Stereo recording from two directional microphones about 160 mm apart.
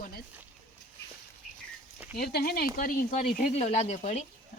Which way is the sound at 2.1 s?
80° left.